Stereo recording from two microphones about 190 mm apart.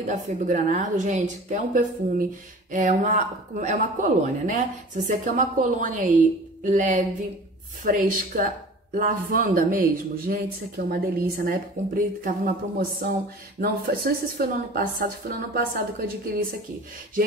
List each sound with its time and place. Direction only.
0.0 s a woman's voice: 40° right (ahead or behind)